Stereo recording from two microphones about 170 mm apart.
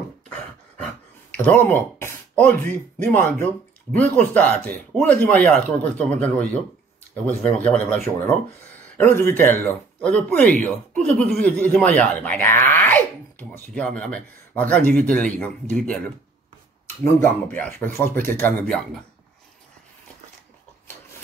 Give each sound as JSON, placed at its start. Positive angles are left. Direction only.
{"t": 1.3, "sound": "a sound", "side_deg": 10}
{"t": 2.7, "sound": "speech", "side_deg": 10}
{"t": 8.0, "sound": "speech", "side_deg": -45}
{"t": 8.9, "sound": "speech", "side_deg": 15}
{"t": 17.0, "sound": "speech", "side_deg": 10}